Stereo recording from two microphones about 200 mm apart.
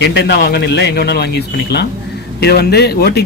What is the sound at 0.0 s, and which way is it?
Speech, 60° left (ahead or behind).